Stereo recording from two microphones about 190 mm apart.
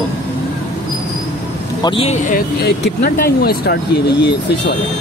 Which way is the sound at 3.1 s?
50° left (ahead or behind).